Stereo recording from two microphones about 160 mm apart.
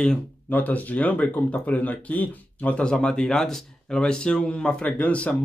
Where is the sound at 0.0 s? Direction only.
5° left (ahead or behind).